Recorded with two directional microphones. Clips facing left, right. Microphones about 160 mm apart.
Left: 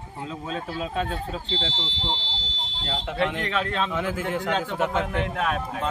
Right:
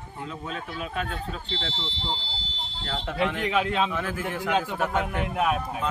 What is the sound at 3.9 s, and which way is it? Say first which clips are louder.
Speech: left 3 dB; 20° left (ahead or behind).